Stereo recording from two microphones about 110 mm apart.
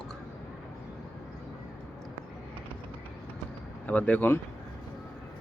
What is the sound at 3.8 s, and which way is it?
Speech, 15° left (ahead or behind).